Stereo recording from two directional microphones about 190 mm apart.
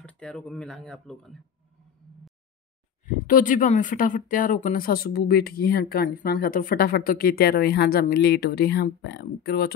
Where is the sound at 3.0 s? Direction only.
45° left (ahead or behind).